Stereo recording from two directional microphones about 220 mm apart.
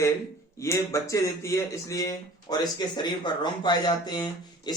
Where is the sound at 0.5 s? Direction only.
15° left (ahead or behind).